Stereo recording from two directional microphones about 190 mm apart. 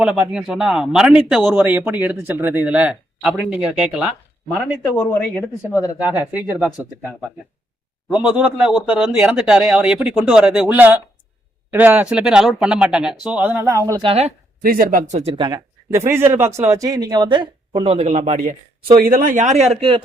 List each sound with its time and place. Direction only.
0.0 s speech: 5° right (ahead or behind)
5.7 s speech: 15° left (ahead or behind)
6.0 s speech: 5° right (ahead or behind)
8.1 s speech: 5° right (ahead or behind)
14.0 s speech: 30° right (ahead or behind)
14.6 s speech: 50° right (ahead or behind)
15.2 s speech: 25° right (ahead or behind)
18.9 s speech: 50° right (ahead or behind)